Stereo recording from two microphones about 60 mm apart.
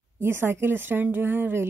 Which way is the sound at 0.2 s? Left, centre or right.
Right.